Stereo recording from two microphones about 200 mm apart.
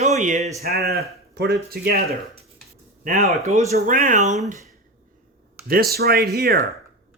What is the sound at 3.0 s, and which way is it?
Speech, 35° right (ahead or behind).